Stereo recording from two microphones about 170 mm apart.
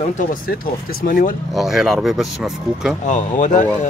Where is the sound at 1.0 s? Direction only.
55° left (ahead or behind).